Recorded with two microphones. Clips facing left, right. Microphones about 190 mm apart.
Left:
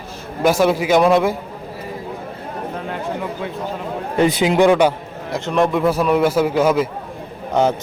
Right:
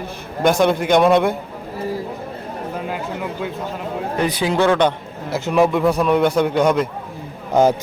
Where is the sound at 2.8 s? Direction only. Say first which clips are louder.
Left 1 dB; 5° right (ahead or behind).